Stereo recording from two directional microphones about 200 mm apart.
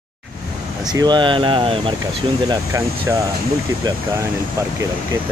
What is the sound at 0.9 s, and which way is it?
Speech, 20° right (ahead or behind).